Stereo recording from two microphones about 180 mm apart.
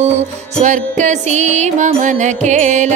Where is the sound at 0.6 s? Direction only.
45° right (ahead or behind).